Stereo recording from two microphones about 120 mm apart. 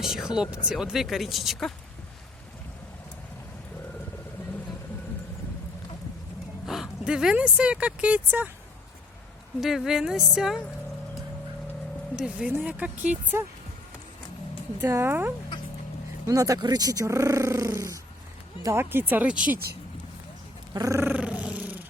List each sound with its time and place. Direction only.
0.0 s speech: 5° right (ahead or behind)
6.7 s speech: 5° right (ahead or behind)
9.6 s speech: 5° right (ahead or behind)
12.1 s speech: 10° right (ahead or behind)
14.8 s speech: 20° right (ahead or behind)
20.7 s roar: 25° right (ahead or behind)